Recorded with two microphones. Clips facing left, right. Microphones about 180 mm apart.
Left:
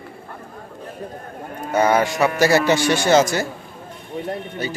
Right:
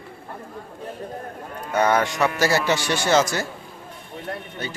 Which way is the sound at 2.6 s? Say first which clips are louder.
Left 5 dB; 50° left (ahead or behind).